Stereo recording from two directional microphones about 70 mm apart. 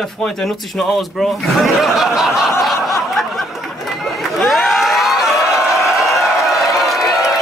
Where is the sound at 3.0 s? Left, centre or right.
Centre.